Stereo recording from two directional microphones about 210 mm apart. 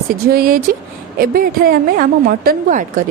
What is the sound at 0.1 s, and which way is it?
A woman's voice, 45° right (ahead or behind).